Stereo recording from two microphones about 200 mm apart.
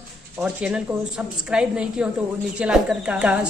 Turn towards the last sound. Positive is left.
turn(degrees=-5)  # may be behind; listen again after turning